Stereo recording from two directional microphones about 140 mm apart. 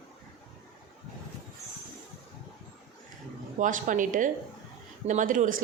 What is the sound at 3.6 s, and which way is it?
A woman's voice, 65° right (ahead or behind).